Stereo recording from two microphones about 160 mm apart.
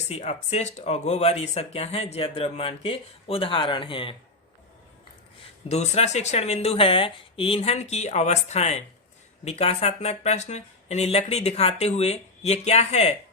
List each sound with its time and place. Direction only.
0.1 s speech: 40° left (ahead or behind)
5.6 s speech: 45° left (ahead or behind)